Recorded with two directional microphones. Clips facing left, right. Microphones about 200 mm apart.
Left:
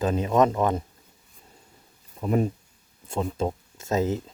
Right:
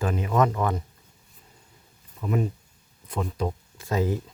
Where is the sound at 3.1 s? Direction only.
25° left (ahead or behind).